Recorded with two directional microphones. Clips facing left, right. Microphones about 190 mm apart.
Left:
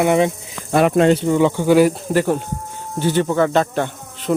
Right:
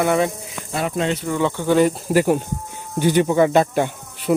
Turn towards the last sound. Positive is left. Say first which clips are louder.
# right 1 dB
turn(degrees=-10)  # may be behind; listen again after turning